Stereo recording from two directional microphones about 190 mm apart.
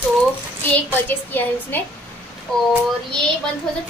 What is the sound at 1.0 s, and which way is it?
A woman's voice, 10° left (ahead or behind).